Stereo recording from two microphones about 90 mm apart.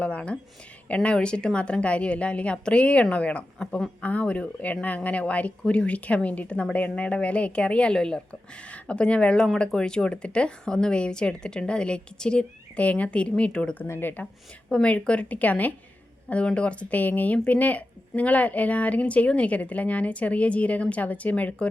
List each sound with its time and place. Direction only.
0.0 s a woman's voice: 15° left (ahead or behind)
13.8 s a woman's voice: 25° left (ahead or behind)